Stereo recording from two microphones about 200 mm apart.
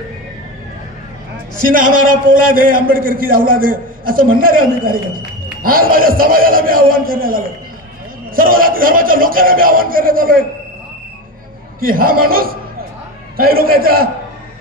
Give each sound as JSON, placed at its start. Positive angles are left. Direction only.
{"t": 1.7, "sound": "a man's voice", "side_deg": -45}
{"t": 11.8, "sound": "a man's voice", "side_deg": -45}